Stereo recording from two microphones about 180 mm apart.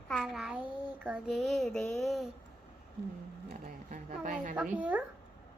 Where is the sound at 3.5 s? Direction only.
55° right (ahead or behind).